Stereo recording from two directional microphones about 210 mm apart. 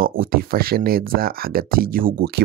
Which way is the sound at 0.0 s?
45° right (ahead or behind).